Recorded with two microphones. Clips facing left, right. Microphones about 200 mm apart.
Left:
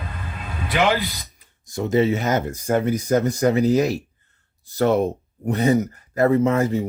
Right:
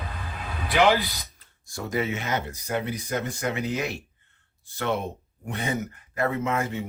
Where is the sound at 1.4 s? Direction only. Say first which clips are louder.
Left 10 dB; 20° left (ahead or behind).